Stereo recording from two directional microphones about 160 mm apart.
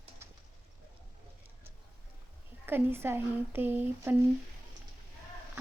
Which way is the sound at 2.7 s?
15° right (ahead or behind).